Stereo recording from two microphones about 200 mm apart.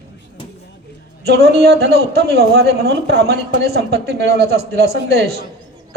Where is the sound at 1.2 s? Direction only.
55° right (ahead or behind).